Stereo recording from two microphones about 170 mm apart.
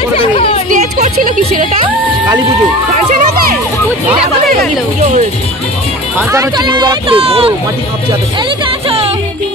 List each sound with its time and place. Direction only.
0.1 s chatter: 35° left (ahead or behind)
0.7 s speech: 50° right (ahead or behind)
6.1 s speech: 20° right (ahead or behind); by 7.5 s 35° right (ahead or behind)
8.8 s music: 35° right (ahead or behind)